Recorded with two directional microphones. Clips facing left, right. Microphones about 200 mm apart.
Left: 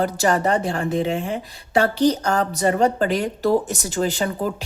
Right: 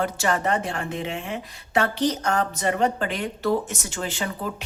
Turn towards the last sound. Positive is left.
turn(degrees=40)  # may be behind; listen again after turning